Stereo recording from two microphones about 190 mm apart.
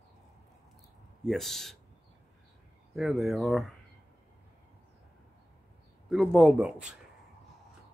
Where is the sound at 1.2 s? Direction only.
Centre (ahead or behind).